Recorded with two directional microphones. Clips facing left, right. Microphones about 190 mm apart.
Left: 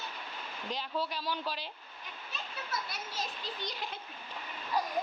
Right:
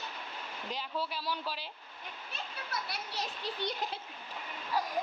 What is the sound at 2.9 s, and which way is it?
Speech, 65° right (ahead or behind).